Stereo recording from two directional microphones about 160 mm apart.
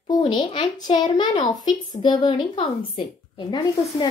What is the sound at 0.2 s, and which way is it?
A child's voice, 30° left (ahead or behind).